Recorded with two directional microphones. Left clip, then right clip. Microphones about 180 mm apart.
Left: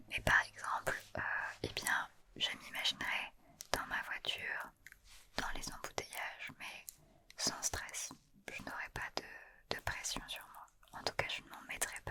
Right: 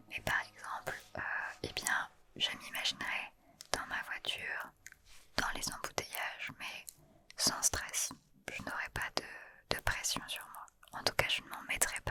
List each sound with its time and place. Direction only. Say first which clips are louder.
0.1 s whispering: left 4 dB; 25° left (ahead or behind)
1.1 s whispering: even; 5° left (ahead or behind)
2.3 s whispering: right 3 dB; 15° right (ahead or behind)
5.4 s whispering: right 5 dB; 25° right (ahead or behind)